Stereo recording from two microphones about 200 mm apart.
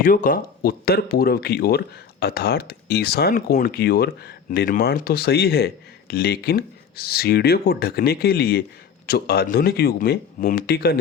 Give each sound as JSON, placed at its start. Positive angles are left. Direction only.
{"t": 0.0, "sound": "speech", "side_deg": 45}